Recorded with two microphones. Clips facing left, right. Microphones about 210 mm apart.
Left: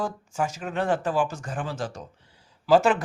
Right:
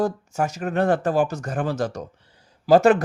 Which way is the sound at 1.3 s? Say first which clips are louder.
Right 6 dB; 40° right (ahead or behind).